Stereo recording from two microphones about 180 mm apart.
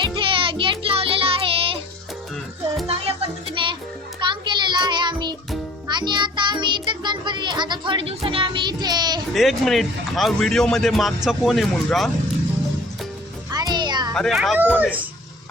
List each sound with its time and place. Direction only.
0.0 s music: 30° right (ahead or behind)
2.8 s music: 30° right (ahead or behind)
4.2 s child singing: 25° right (ahead or behind)
5.9 s music: 25° right (ahead or behind)
9.3 s speech: centre (ahead or behind)
13.5 s music: 20° right (ahead or behind)
14.1 s speech: centre (ahead or behind)